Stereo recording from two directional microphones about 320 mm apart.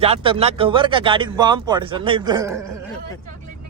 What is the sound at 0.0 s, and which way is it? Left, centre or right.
Speech, centre.